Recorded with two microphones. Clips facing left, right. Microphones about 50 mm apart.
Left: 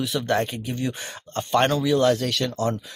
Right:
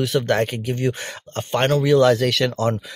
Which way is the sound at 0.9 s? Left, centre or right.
Right.